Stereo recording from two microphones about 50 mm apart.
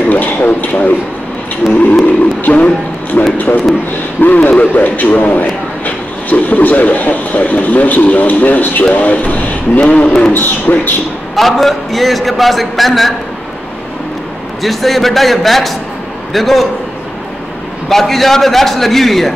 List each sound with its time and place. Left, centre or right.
0.1 s speech: left
1.6 s wild animals: centre
2.4 s a man's voice: left
11.3 s speech: centre
14.6 s speech: centre
17.8 s speech: centre